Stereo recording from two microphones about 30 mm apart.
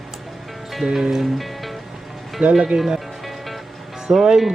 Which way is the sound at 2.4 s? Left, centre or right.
Right.